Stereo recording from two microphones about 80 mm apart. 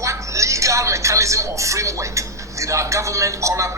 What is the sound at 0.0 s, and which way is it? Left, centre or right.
Speech, right.